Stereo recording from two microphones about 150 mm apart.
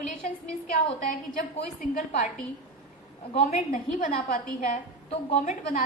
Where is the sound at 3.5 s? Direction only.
60° left (ahead or behind).